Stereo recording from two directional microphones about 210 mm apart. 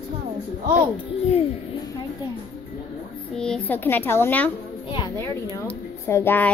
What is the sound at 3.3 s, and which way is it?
A child's voice, 5° left (ahead or behind).